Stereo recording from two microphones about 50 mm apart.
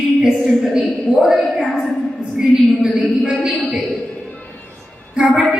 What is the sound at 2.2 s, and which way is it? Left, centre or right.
Speech, centre.